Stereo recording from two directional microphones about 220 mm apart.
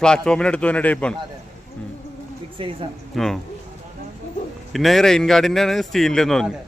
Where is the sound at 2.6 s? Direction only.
25° right (ahead or behind).